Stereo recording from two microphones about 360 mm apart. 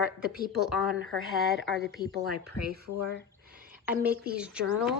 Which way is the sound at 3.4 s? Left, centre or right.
Right.